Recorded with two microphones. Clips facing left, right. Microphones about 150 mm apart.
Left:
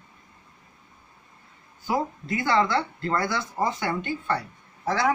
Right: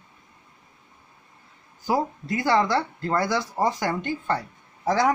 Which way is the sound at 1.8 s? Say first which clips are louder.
Right 2 dB; 40° right (ahead or behind).